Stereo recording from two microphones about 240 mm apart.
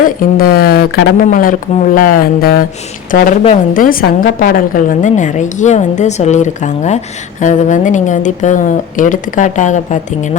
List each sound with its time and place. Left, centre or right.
0.0 s a woman's voice: left